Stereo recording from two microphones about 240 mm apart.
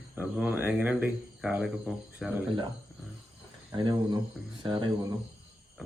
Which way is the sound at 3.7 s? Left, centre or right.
Centre.